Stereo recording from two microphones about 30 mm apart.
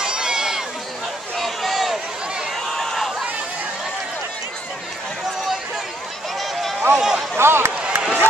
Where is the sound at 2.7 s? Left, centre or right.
Centre.